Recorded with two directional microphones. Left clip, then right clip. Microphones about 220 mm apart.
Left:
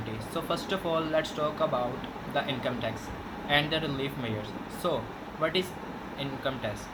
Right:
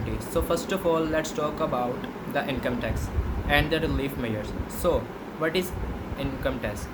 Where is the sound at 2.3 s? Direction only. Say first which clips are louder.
Right 3 dB; 40° right (ahead or behind).